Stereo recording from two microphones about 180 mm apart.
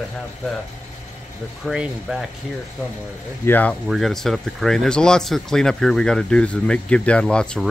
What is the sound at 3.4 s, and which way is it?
Speech, 10° left (ahead or behind).